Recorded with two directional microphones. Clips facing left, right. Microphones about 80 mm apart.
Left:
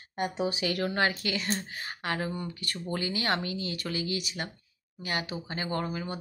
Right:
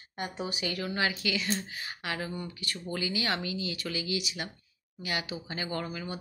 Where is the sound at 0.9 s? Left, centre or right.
Left.